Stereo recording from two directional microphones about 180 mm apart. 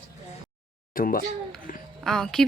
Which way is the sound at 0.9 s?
50° left (ahead or behind).